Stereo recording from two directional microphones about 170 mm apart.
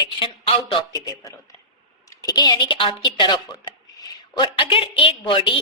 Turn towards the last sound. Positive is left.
turn(degrees=30)  # may be behind; listen again after turning